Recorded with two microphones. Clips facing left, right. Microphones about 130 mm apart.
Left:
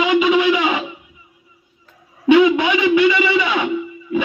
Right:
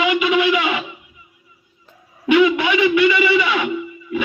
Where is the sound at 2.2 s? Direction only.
20° left (ahead or behind).